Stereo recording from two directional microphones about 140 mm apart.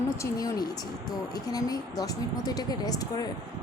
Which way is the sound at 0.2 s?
25° left (ahead or behind).